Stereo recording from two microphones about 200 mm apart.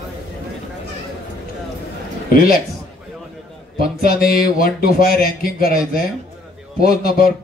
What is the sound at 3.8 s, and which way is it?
Speech, 50° left (ahead or behind).